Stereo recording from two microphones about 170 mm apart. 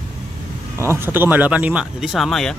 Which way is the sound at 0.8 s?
15° right (ahead or behind).